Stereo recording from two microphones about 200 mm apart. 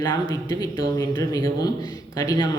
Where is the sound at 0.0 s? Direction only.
20° left (ahead or behind).